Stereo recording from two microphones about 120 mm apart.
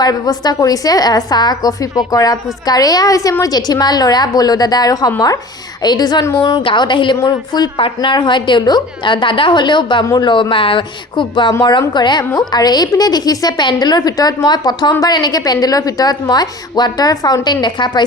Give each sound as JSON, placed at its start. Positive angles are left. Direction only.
{"t": 0.0, "sound": "a woman's voice", "side_deg": 35}
{"t": 6.6, "sound": "a woman's voice", "side_deg": 40}